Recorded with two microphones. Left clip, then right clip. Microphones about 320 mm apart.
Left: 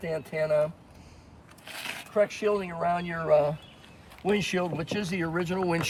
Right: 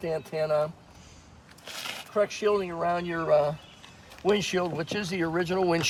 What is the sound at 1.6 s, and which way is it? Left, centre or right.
Speech, centre.